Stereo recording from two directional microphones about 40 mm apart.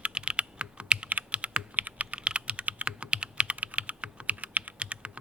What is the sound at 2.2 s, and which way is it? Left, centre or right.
Computer keyboard, right.